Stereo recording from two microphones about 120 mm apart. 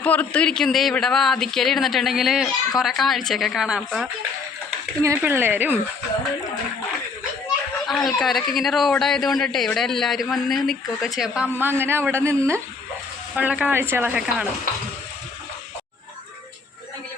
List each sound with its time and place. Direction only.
0.0 s a man's voice: 10° left (ahead or behind); by 4.1 s 5° right (ahead or behind)
5.0 s speech: 20° right (ahead or behind)
7.9 s a man's voice: centre (ahead or behind)
11.6 s speech: 20° right (ahead or behind)
13.3 s speech: 10° right (ahead or behind)